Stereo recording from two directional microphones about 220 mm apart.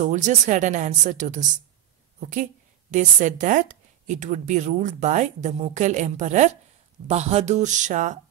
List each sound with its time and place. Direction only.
0.0 s a woman's voice: 30° right (ahead or behind)